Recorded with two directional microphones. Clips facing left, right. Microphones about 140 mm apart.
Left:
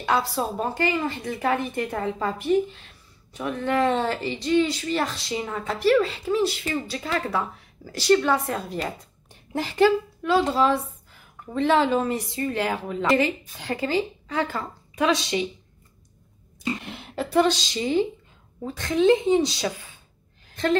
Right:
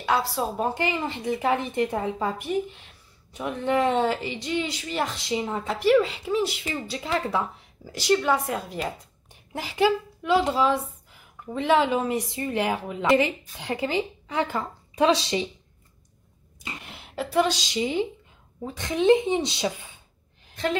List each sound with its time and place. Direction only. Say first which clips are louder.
0.0 s speech: left 1 dB; 5° right (ahead or behind); by 15.4 s 30° right (ahead or behind)
16.8 s speech: left 2 dB; 5° right (ahead or behind); by 19.7 s 20° right (ahead or behind)